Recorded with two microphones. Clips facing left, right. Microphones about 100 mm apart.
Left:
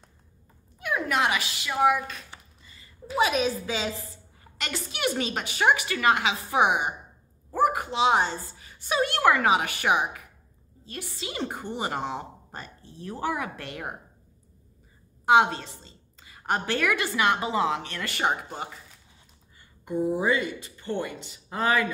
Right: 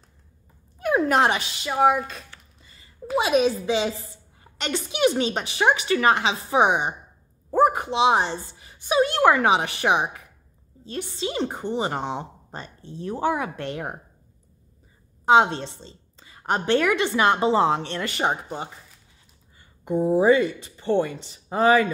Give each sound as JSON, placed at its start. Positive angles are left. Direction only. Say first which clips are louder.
{"t": 0.7, "sound": "speech", "louder": "right 6 dB", "side_deg": -40}
{"t": 1.7, "sound": "a woman's voice", "louder": "right 3 dB", "side_deg": -25}
{"t": 15.2, "sound": "a woman's voice", "louder": "right 3 dB", "side_deg": -25}
{"t": 19.8, "sound": "a woman's voice", "louder": "right 6 dB", "side_deg": -20}